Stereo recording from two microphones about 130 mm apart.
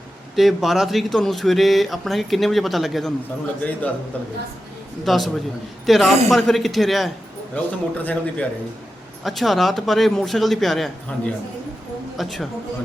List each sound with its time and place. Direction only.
0.3 s a man's voice: centre (ahead or behind)
5.0 s speech: centre (ahead or behind)
7.5 s a man's voice: 10° left (ahead or behind)
9.2 s speech: centre (ahead or behind)